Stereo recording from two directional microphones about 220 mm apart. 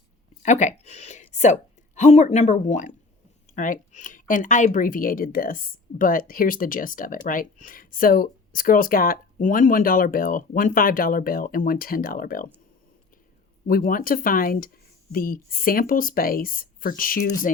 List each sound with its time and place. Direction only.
0.4 s a woman's voice: 30° left (ahead or behind)
13.7 s a woman's voice: 40° left (ahead or behind)